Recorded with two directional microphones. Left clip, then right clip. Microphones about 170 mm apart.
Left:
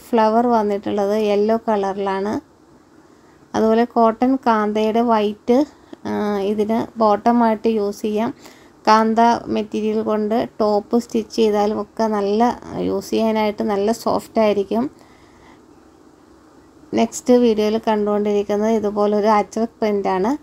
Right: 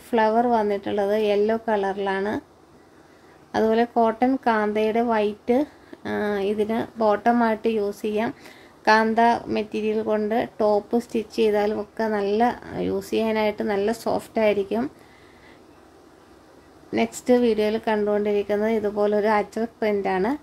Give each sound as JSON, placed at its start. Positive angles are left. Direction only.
{"t": 0.1, "sound": "a woman's voice", "side_deg": 20}
{"t": 3.5, "sound": "a woman's voice", "side_deg": 15}
{"t": 16.9, "sound": "a woman's voice", "side_deg": 20}